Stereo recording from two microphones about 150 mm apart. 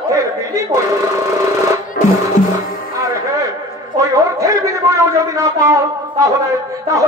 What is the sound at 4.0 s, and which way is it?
A man's voice, 20° right (ahead or behind).